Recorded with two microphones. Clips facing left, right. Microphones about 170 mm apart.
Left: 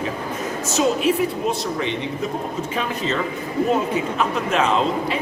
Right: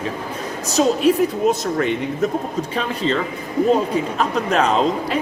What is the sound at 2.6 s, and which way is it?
A woman's voice, 35° right (ahead or behind).